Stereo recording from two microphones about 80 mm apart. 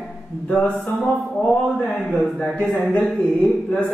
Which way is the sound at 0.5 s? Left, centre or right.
Centre.